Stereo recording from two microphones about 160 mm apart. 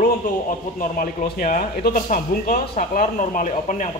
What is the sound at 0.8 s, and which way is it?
Speech, 60° left (ahead or behind).